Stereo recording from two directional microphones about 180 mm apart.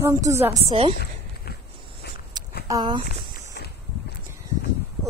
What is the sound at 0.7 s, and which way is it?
Speech, 30° right (ahead or behind).